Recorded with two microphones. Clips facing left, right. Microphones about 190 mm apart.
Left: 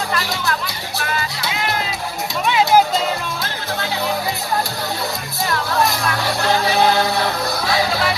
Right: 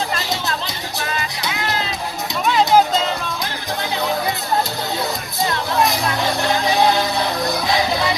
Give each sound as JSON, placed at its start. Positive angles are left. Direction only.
{"t": 0.1, "sound": "music", "side_deg": -20}
{"t": 2.5, "sound": "music", "side_deg": 0}
{"t": 5.5, "sound": "music", "side_deg": -20}